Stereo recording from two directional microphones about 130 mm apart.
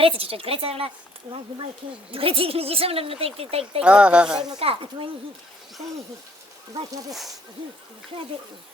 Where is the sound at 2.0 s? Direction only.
45° right (ahead or behind).